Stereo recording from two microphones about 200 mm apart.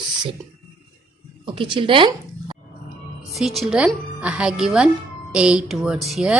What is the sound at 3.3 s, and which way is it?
Speech, centre (ahead or behind).